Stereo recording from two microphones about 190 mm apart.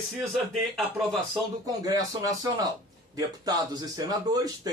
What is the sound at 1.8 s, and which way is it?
Speech, 20° right (ahead or behind).